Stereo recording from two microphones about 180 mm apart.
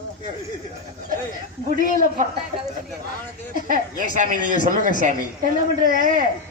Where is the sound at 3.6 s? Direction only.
50° right (ahead or behind).